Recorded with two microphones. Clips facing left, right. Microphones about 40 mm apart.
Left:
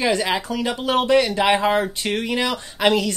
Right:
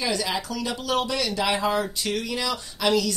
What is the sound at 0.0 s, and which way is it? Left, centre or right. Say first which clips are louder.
Speech: left 6 dB; left.